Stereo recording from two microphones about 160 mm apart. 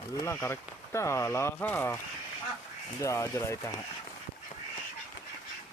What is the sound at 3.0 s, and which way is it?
Speech, 20° left (ahead or behind).